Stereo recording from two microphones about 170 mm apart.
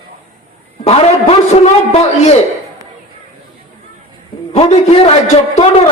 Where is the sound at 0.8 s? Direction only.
35° left (ahead or behind).